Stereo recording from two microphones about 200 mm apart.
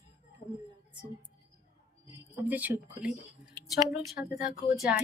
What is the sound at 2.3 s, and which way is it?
Speech, 10° right (ahead or behind).